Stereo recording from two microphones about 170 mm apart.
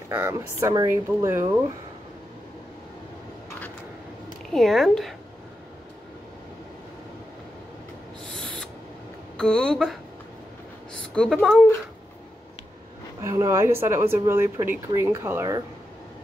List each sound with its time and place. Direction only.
0.1 s speech: 15° right (ahead or behind)
4.5 s speech: centre (ahead or behind)
8.3 s owl: 5° left (ahead or behind)
9.4 s speech: 5° left (ahead or behind)
11.0 s a woman's voice: 5° left (ahead or behind)
13.2 s speech: 15° right (ahead or behind)